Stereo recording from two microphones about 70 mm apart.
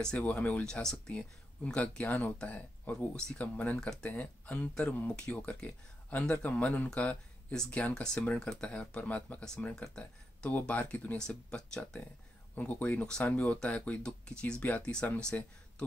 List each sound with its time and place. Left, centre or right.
0.2 s speech: left
12.5 s speech: left